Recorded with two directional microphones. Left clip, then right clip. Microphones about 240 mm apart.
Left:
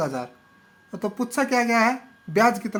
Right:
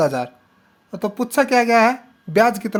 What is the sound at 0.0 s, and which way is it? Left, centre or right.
Speech, right.